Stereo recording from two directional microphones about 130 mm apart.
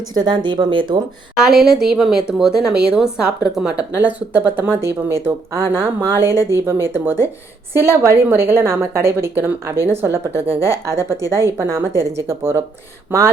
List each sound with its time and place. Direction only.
0.1 s speech: 35° right (ahead or behind)
1.4 s a woman's voice: 5° right (ahead or behind); by 13.3 s 20° right (ahead or behind)